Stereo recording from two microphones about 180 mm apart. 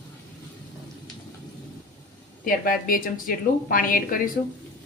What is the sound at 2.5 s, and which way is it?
A woman's voice, 50° left (ahead or behind).